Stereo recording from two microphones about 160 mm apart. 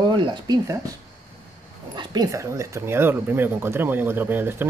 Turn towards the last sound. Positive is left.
turn(degrees=-10)  # may be behind; listen again after turning